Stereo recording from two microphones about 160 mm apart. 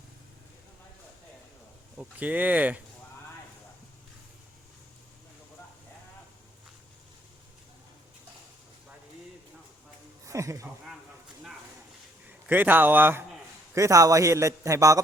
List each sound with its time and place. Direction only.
2.0 s speech: 10° right (ahead or behind)
10.2 s speech: 20° right (ahead or behind)
12.5 s a man's voice: 10° right (ahead or behind)